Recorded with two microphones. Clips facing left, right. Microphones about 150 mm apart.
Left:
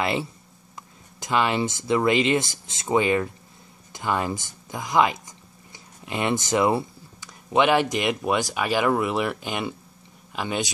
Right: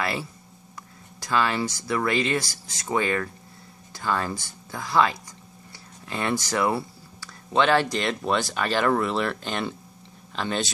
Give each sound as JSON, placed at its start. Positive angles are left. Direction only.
{"t": 0.0, "sound": "speech", "side_deg": 20}